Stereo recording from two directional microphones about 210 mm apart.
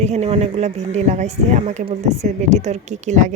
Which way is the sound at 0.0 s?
30° right (ahead or behind).